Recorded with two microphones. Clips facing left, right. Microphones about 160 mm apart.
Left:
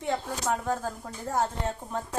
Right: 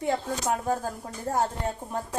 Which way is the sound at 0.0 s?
15° right (ahead or behind).